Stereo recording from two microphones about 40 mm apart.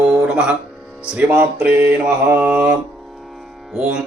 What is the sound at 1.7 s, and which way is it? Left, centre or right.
Mantra, right.